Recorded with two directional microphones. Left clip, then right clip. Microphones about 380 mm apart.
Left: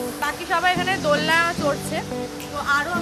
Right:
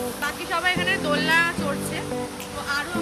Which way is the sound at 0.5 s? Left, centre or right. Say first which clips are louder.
Left 2 dB; left.